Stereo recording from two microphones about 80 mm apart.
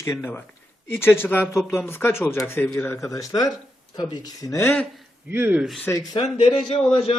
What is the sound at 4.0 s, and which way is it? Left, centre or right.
Speech, left.